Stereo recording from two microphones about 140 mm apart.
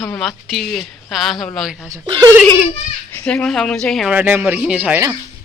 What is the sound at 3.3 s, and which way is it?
Speech, 5° left (ahead or behind).